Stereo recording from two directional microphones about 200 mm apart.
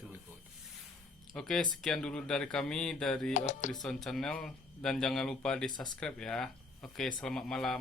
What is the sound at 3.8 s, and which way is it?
Speech, centre (ahead or behind).